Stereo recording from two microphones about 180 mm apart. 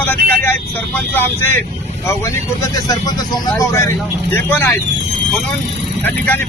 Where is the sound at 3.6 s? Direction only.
15° left (ahead or behind).